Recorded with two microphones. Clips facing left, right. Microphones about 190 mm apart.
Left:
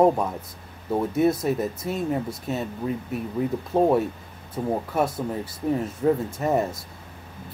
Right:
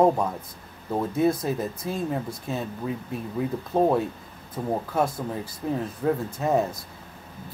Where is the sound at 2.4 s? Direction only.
5° left (ahead or behind).